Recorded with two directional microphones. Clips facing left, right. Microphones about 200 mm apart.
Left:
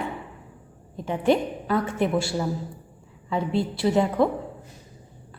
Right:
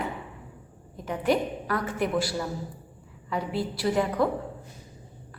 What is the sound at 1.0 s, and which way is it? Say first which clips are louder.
A woman's voice: left 3 dB; 25° left (ahead or behind).